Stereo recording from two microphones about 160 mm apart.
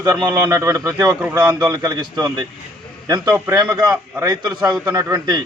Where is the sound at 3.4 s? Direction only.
15° right (ahead or behind).